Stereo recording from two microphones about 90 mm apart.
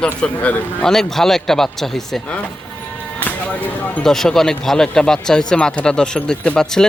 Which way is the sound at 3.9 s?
5° left (ahead or behind).